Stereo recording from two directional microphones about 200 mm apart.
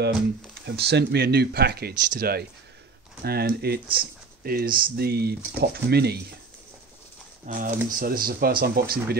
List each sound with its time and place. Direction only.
0.7 s speech: 55° right (ahead or behind)
7.4 s speech: 40° right (ahead or behind)